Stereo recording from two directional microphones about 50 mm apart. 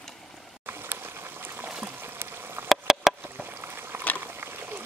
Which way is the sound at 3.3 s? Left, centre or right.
Right.